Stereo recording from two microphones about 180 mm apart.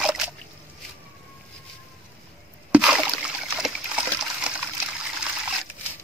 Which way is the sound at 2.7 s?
5° right (ahead or behind).